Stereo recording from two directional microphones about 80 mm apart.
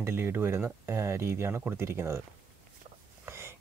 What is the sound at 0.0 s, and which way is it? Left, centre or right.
Speech, right.